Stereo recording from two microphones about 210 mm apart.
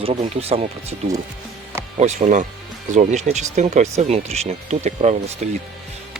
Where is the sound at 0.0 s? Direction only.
30° right (ahead or behind).